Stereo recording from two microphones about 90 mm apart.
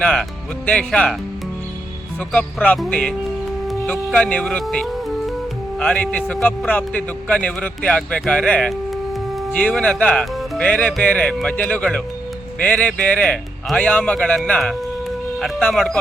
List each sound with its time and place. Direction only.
0.0 s speech: 5° left (ahead or behind)
2.3 s speech: 15° left (ahead or behind)